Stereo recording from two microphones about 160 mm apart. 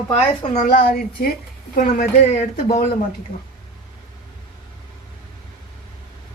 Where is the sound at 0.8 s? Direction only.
70° left (ahead or behind).